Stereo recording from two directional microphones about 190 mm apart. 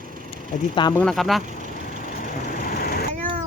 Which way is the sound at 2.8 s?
55° left (ahead or behind).